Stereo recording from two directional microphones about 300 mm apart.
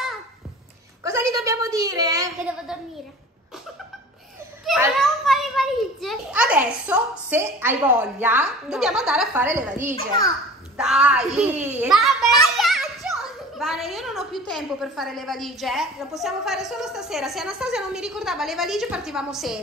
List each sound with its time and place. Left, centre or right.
1.0 s a sound: centre
4.6 s a child's voice: centre
9.9 s a child's voice: centre
10.8 s a child's voice: centre